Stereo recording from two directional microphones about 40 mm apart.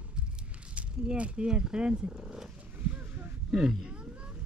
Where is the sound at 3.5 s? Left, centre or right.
Centre.